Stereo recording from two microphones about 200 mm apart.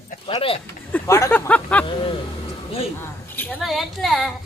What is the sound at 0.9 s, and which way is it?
Speech, 15° left (ahead or behind).